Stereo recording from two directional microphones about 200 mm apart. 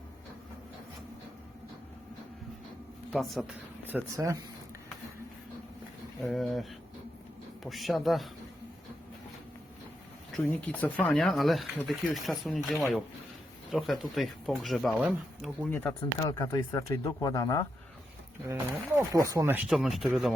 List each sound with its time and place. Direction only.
3.1 s speech: centre (ahead or behind)
6.2 s speech: centre (ahead or behind)
10.3 s speech: 5° left (ahead or behind)
15.7 s speech: 10° left (ahead or behind)
18.9 s speech: 15° right (ahead or behind); by 20.3 s centre (ahead or behind)